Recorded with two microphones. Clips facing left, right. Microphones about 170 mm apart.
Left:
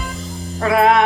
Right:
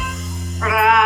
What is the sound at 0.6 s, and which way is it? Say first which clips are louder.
Music: left 3 dB; 30° left (ahead or behind).